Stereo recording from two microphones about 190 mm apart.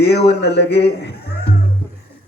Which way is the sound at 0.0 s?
60° left (ahead or behind).